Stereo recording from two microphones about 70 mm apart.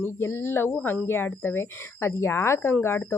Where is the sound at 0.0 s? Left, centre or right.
Left.